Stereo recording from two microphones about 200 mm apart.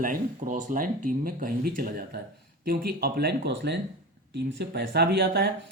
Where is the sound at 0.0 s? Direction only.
40° right (ahead or behind).